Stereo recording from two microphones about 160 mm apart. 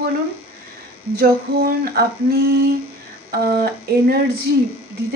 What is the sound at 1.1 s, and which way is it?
Speech, 75° right (ahead or behind).